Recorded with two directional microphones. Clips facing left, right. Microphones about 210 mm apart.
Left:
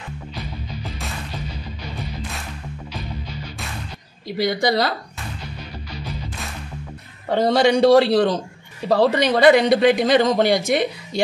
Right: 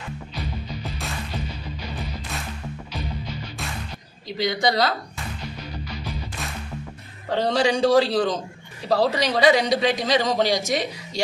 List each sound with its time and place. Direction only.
4.4 s a man's voice: 60° left (ahead or behind)
7.4 s a man's voice: 65° left (ahead or behind)